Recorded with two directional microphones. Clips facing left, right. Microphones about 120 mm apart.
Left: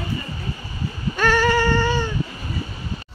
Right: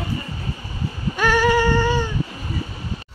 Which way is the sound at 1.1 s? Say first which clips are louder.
Right 1 dB; 10° right (ahead or behind).